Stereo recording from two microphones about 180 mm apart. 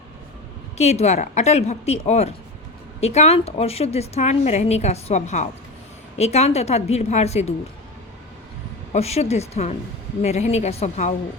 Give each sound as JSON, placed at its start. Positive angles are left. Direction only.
{"t": 0.8, "sound": "a woman's voice", "side_deg": 40}
{"t": 8.9, "sound": "a woman's voice", "side_deg": 35}